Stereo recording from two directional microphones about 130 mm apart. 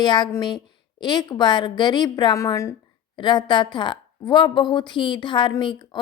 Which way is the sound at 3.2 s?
35° left (ahead or behind).